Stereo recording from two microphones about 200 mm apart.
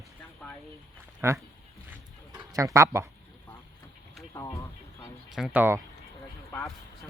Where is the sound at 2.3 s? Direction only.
15° right (ahead or behind).